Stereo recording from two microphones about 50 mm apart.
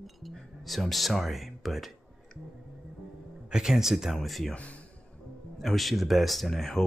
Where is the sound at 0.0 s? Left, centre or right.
Centre.